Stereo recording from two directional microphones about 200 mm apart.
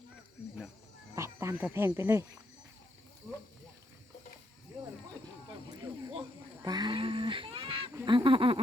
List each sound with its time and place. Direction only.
1.1 s speech: 15° right (ahead or behind)
6.6 s a sound: 20° right (ahead or behind)
8.0 s honk: 25° right (ahead or behind)